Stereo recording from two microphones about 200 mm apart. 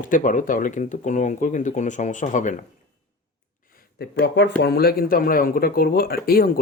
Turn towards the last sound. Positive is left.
turn(degrees=50)  # may be behind; listen again after turning